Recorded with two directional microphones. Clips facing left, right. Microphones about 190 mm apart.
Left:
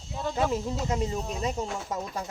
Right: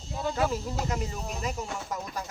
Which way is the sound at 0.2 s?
Centre (ahead or behind).